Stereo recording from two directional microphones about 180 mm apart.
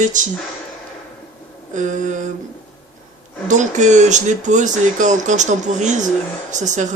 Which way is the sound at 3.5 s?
40° right (ahead or behind).